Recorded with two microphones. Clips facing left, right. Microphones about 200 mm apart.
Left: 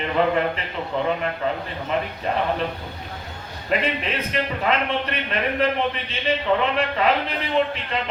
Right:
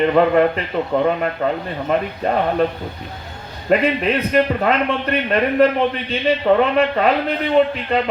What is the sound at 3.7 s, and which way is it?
A man's voice, 45° right (ahead or behind).